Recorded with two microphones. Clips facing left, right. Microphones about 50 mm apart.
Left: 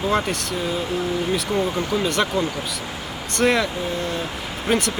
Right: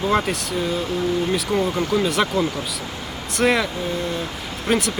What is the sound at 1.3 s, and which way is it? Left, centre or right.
Speech, centre.